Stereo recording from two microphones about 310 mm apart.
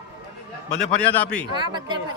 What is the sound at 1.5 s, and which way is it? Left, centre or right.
Speech, centre.